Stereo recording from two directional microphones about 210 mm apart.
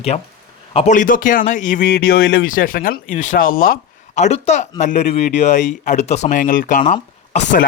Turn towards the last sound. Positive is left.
turn(degrees=35)  # may be behind; listen again after turning